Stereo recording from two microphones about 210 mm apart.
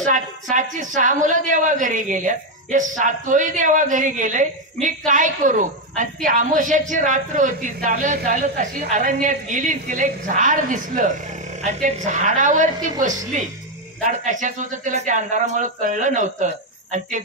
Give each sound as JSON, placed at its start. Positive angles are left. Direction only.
{"t": 0.0, "sound": "a woman's voice", "side_deg": -35}
{"t": 14.0, "sound": "a woman's voice", "side_deg": -40}